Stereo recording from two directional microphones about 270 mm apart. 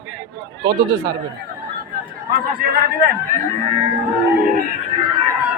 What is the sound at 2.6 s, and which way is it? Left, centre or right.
Speech, right.